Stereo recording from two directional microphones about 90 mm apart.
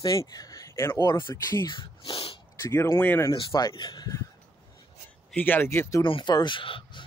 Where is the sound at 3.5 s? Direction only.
45° left (ahead or behind).